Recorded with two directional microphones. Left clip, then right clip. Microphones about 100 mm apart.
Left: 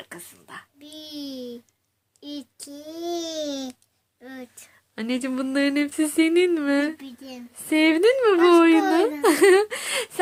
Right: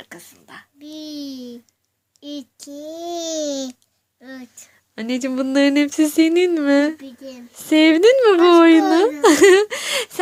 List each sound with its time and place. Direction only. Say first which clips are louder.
0.0 s a sound: right 1 dB; 40° right (ahead or behind)
0.8 s a child's voice: right 7 dB; 30° right (ahead or behind); by 5.5 s 50° right (ahead or behind)
5.5 s speech: right 7 dB; 80° right; by 6.9 s 55° right (ahead or behind)
7.5 s speech: right 6 dB; 75° right (ahead or behind); by 9.6 s 90° right